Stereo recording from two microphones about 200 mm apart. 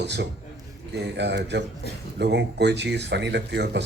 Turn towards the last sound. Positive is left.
turn(degrees=-55)  # may be behind; listen again after turning